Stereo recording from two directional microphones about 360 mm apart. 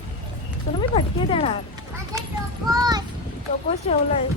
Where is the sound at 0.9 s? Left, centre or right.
Centre.